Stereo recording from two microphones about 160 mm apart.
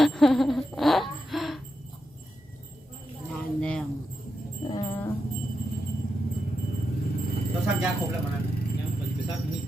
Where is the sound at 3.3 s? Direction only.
5° left (ahead or behind).